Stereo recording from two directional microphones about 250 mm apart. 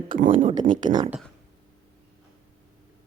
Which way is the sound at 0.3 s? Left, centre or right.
Centre.